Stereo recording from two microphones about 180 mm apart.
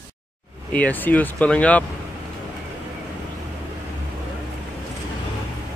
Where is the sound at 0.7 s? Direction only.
10° left (ahead or behind).